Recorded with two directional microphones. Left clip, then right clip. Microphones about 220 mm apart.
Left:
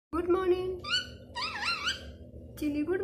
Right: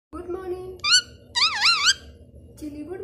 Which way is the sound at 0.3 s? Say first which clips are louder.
Left 4 dB; 15° left (ahead or behind).